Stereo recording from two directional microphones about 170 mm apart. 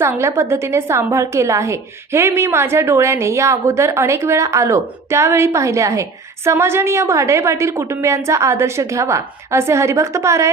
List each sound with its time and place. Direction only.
0.0 s a woman's voice: 15° right (ahead or behind)